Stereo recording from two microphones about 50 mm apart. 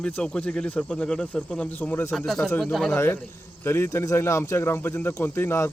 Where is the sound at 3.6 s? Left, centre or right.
Left.